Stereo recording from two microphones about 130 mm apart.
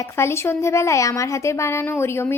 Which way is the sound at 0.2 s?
20° left (ahead or behind).